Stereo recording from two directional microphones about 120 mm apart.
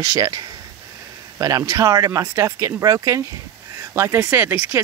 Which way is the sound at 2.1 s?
20° right (ahead or behind).